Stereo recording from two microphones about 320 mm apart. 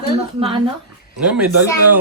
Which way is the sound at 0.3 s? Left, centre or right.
Centre.